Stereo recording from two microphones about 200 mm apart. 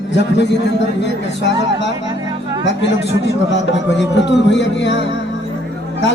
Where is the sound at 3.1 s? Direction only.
65° left (ahead or behind).